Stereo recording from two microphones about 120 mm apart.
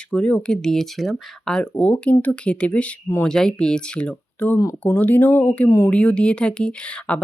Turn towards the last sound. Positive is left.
turn(degrees=10)  # may be behind; listen again after turning